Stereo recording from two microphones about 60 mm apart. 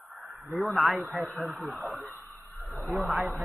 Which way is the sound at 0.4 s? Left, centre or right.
Centre.